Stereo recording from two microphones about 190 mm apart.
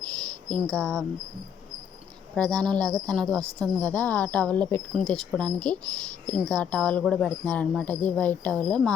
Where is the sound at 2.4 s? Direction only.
5° left (ahead or behind).